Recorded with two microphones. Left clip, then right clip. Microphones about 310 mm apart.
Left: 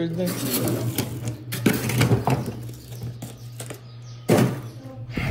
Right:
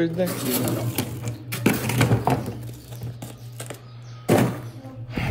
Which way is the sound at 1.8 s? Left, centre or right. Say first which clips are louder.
Right 1 dB; right.